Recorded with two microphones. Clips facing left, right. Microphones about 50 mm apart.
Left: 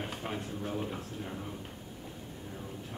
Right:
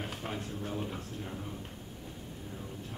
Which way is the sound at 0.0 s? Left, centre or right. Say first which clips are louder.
Left 1 dB; centre.